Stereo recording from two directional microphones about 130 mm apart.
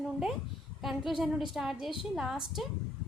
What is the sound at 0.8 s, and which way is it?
A woman's voice, centre (ahead or behind).